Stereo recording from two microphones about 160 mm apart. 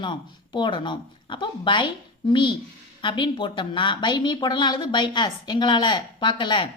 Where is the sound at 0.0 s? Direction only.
30° left (ahead or behind).